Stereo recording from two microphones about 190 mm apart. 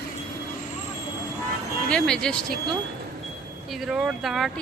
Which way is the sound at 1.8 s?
5° left (ahead or behind).